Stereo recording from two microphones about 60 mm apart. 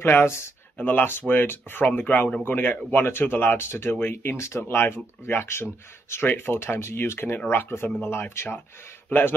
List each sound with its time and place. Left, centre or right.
0.0 s speech: left
0.7 s speech: left